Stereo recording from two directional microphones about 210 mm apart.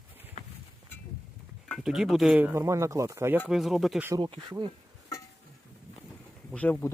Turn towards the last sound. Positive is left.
turn(degrees=10)  # may be behind; listen again after turning